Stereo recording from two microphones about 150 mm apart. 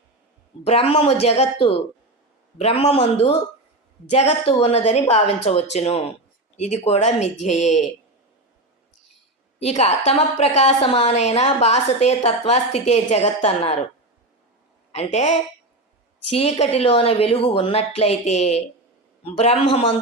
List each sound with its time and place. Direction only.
0.6 s a woman's voice: 40° left (ahead or behind)
9.6 s a woman's voice: 45° left (ahead or behind)
14.9 s a woman's voice: 50° left (ahead or behind)